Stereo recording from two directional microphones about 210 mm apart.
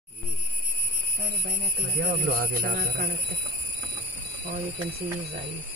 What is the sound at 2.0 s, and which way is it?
Speech, 45° right (ahead or behind).